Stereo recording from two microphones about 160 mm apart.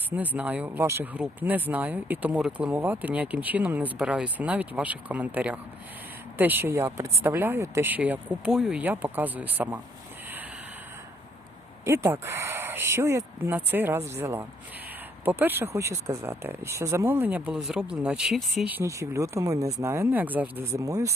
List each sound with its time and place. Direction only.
0.1 s speech: 10° right (ahead or behind)
11.9 s speech: 15° right (ahead or behind)
18.6 s speech: 15° right (ahead or behind)